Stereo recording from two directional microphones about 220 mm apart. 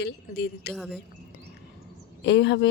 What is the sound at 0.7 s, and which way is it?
Speech, centre (ahead or behind).